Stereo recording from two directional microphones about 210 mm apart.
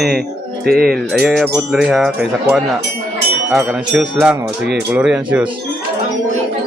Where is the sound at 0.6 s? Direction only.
45° right (ahead or behind).